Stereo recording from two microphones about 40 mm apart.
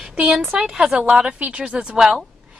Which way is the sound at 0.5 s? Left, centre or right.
Centre.